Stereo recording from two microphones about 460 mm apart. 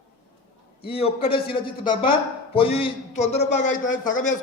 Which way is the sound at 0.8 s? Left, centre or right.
Centre.